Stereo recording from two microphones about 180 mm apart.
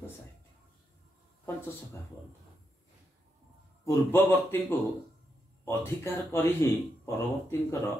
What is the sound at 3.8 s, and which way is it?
Speech, 10° left (ahead or behind).